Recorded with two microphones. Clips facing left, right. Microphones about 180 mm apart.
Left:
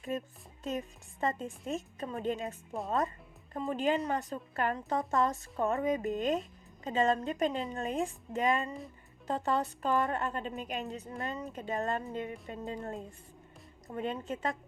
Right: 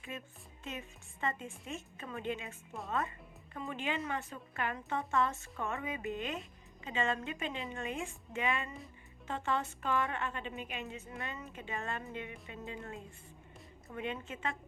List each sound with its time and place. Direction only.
0.1 s speech: 40° left (ahead or behind)